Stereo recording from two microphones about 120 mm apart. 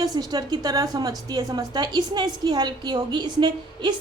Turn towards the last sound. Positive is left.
turn(degrees=-40)  # may be behind; listen again after turning